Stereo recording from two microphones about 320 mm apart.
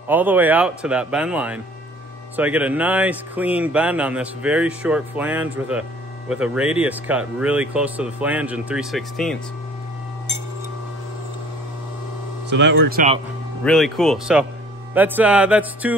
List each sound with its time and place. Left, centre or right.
0.1 s speech: centre
12.4 s speech: right
13.7 s speech: centre